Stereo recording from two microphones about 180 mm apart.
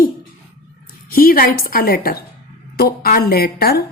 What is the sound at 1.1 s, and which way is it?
A woman's voice, 55° left (ahead or behind).